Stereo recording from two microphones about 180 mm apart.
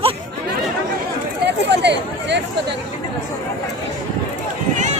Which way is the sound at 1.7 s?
75° right (ahead or behind).